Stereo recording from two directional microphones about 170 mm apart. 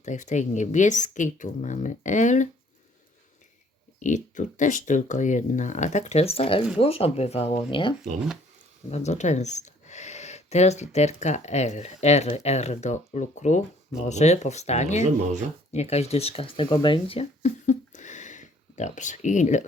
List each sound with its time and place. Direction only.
0.0 s speech: 45° left (ahead or behind)
4.0 s speech: 45° left (ahead or behind); by 7.9 s 30° left (ahead or behind)
8.9 s speech: 40° left (ahead or behind)